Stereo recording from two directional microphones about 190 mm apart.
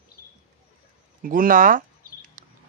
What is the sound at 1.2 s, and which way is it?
Speech, 45° right (ahead or behind).